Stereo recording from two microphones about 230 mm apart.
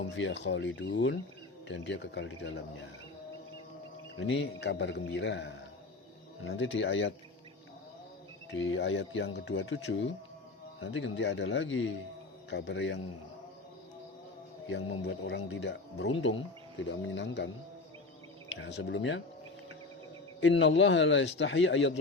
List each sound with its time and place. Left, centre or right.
0.1 s speech: left
4.6 s speech: left
8.4 s speech: left
14.7 s speech: left
18.6 s speech: left
20.4 s speech: left